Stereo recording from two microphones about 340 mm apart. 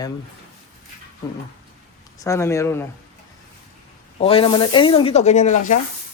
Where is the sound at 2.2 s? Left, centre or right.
Centre.